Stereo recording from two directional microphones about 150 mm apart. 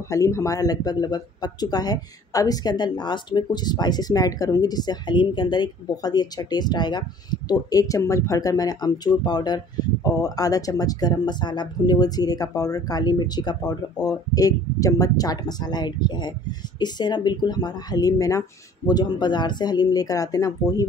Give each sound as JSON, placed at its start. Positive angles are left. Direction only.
{"t": 0.1, "sound": "speech", "side_deg": 20}